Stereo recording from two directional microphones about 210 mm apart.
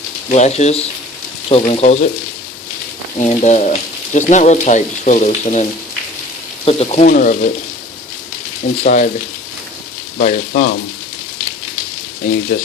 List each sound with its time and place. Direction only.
0.3 s speech: 30° left (ahead or behind)
3.2 s speech: 35° left (ahead or behind)
6.7 s speech: 30° left (ahead or behind)
7.1 s speech: 40° left (ahead or behind)
8.8 s speech: 35° left (ahead or behind)
10.2 s speech: 40° left (ahead or behind)
12.5 s speech: 40° left (ahead or behind)